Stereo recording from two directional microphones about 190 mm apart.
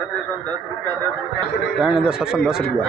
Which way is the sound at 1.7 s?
5° right (ahead or behind).